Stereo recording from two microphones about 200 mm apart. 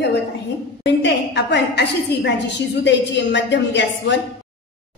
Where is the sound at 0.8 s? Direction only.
60° left (ahead or behind).